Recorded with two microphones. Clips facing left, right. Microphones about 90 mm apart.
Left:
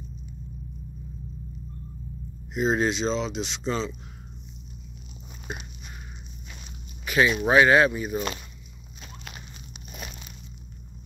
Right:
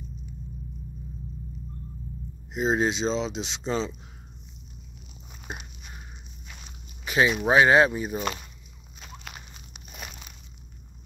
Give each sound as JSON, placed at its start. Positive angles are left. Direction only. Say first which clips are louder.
{"t": 2.5, "sound": "speech", "louder": "left 1 dB", "side_deg": -20}
{"t": 7.1, "sound": "speech", "louder": "left 1 dB", "side_deg": -25}